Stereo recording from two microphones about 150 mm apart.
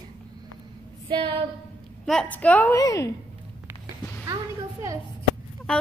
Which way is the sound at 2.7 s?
20° left (ahead or behind).